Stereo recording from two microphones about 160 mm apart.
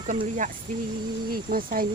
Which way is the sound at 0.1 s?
50° right (ahead or behind).